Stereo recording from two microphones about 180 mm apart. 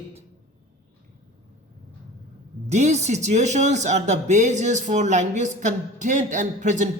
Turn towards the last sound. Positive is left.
turn(degrees=-45)  # may be behind; listen again after turning